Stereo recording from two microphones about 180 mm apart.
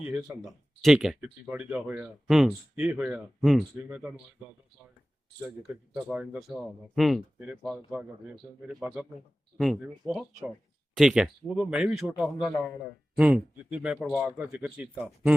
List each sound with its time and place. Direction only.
0.0 s speech: 10° right (ahead or behind)
5.6 s speech: 5° right (ahead or behind)
12.5 s a man's voice: 20° left (ahead or behind)
13.1 s speech: 5° right (ahead or behind)